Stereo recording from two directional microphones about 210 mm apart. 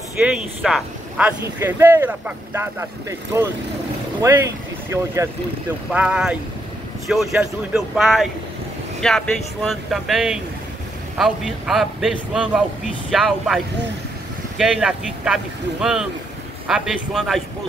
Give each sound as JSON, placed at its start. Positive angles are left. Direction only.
{"t": 0.2, "sound": "a man's voice", "side_deg": -5}
{"t": 14.6, "sound": "a man's voice", "side_deg": 0}